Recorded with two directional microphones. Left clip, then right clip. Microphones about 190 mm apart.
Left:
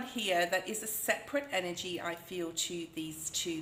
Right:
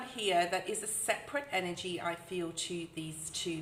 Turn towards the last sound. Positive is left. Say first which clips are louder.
# left 3 dB
turn(degrees=30)  # may be behind; listen again after turning